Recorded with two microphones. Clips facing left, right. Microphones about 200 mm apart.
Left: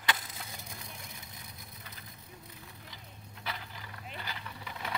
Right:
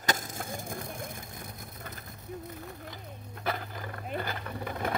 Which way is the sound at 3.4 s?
50° right (ahead or behind).